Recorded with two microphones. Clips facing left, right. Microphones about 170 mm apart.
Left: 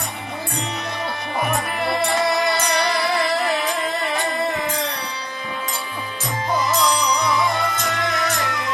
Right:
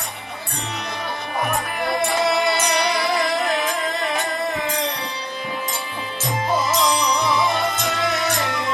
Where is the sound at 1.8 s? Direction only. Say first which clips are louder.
Even; centre (ahead or behind).